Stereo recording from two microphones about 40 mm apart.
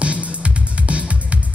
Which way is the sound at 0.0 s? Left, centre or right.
Right.